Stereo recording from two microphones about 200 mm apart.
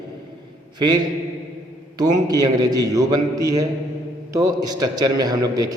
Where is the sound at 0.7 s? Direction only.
20° right (ahead or behind).